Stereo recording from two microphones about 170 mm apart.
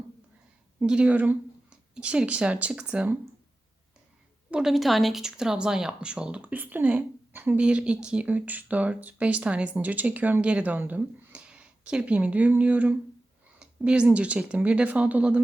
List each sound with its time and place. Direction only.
0.8 s speech: 5° right (ahead or behind)
4.5 s speech: centre (ahead or behind)